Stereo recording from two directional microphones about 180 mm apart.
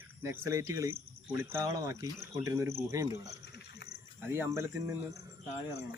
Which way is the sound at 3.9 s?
15° right (ahead or behind).